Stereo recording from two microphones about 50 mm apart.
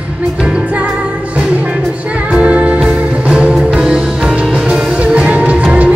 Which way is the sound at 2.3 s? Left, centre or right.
Right.